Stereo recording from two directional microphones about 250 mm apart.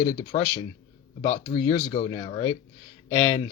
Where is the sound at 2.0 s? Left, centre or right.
Left.